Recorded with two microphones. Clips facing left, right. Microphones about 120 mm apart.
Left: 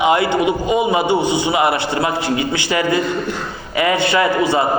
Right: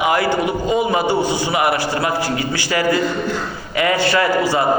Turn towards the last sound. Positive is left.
turn(degrees=20)  # may be behind; listen again after turning